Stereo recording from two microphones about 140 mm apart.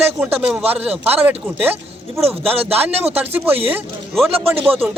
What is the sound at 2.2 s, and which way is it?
Speech, 45° right (ahead or behind).